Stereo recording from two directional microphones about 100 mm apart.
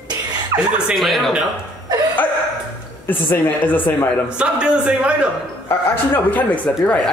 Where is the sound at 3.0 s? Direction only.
20° left (ahead or behind).